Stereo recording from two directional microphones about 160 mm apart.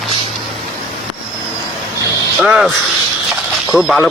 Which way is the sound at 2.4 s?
5° right (ahead or behind).